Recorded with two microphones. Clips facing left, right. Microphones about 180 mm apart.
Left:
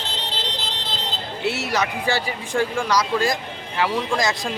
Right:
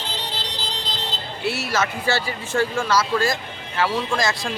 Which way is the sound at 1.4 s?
20° left (ahead or behind).